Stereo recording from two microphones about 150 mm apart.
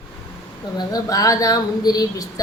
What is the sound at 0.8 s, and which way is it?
Speech, 25° left (ahead or behind).